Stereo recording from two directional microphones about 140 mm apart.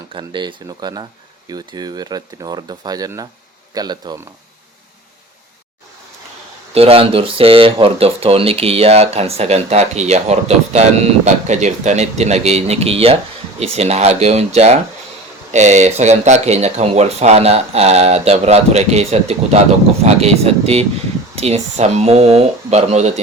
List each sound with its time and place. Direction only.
0.1 s speech: 35° right (ahead or behind)
6.7 s speech: 45° right (ahead or behind)